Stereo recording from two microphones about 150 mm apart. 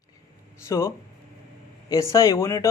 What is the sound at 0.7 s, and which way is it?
A man's voice, 20° left (ahead or behind).